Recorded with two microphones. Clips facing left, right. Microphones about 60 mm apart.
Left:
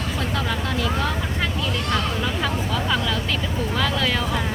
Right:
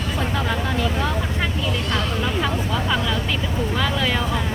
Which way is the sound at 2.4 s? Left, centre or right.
Centre.